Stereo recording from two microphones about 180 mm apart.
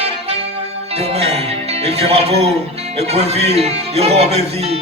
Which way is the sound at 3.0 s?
35° right (ahead or behind).